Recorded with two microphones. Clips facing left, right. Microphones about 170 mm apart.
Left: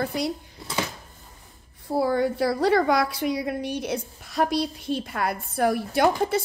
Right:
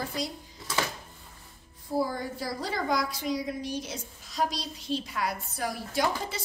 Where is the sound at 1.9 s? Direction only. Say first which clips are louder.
Left 7 dB; 70° left (ahead or behind).